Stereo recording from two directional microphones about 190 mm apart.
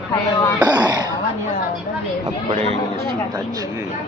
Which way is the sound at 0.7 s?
20° right (ahead or behind).